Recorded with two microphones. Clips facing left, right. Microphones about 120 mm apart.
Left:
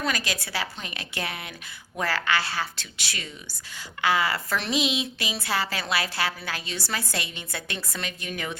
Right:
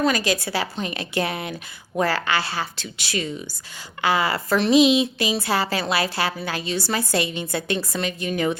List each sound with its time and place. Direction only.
0.0 s speech: 30° right (ahead or behind)